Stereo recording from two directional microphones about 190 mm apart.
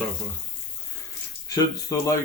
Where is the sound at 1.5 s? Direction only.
15° left (ahead or behind).